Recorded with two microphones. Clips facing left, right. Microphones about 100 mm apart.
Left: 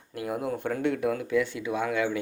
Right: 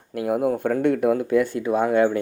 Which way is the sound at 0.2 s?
50° right (ahead or behind).